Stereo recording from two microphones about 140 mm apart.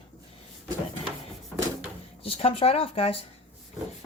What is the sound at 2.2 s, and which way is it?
Speech, 45° left (ahead or behind).